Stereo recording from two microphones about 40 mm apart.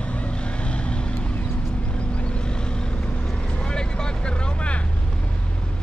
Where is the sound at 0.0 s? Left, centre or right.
Left.